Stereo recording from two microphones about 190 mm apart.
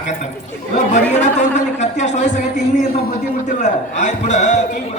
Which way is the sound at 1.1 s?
40° left (ahead or behind).